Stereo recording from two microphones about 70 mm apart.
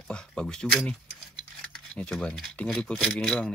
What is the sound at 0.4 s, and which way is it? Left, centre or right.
Speech, centre.